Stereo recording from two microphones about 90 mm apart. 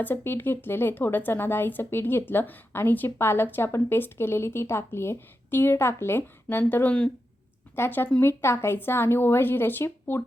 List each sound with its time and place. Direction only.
0.0 s speech: 25° left (ahead or behind)